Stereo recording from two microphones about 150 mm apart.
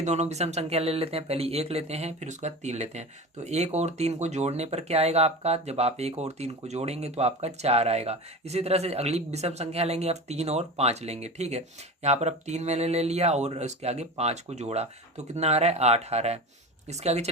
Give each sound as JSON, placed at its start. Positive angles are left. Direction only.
{"t": 0.0, "sound": "speech", "side_deg": -50}